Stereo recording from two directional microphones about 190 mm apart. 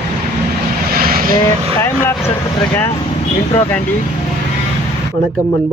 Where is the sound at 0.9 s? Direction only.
50° right (ahead or behind).